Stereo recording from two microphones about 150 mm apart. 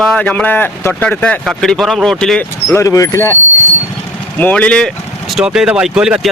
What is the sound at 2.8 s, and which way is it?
Speech, 20° left (ahead or behind).